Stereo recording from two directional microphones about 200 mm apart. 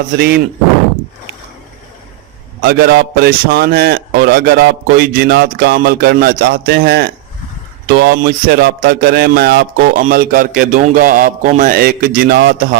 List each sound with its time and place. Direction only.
0.1 s a man's voice: 50° right (ahead or behind)
2.6 s a man's voice: 50° right (ahead or behind)